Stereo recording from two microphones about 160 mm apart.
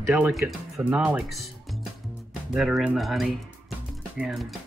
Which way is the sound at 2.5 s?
5° right (ahead or behind).